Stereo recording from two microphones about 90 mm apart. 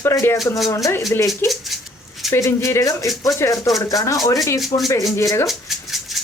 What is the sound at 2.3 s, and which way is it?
A woman's voice, 30° left (ahead or behind).